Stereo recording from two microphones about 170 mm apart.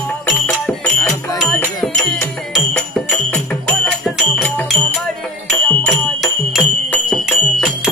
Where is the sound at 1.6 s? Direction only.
15° left (ahead or behind).